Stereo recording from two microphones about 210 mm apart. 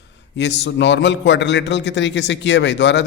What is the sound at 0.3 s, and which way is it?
A man's voice, 55° left (ahead or behind).